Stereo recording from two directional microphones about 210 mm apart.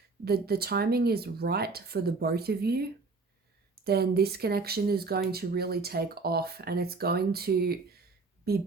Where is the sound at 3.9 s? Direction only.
50° right (ahead or behind).